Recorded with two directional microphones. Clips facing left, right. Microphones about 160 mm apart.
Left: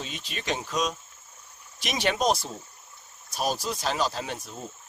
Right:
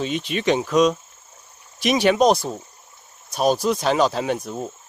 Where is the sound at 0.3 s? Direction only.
80° right.